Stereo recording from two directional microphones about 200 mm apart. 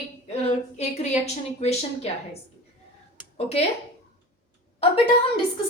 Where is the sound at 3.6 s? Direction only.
30° left (ahead or behind).